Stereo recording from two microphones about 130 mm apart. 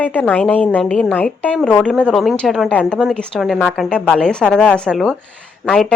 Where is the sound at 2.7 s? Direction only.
10° left (ahead or behind).